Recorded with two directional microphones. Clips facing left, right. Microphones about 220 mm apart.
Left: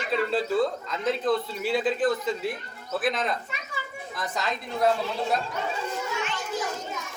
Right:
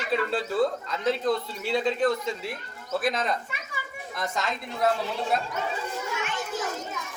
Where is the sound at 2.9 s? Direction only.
Centre (ahead or behind).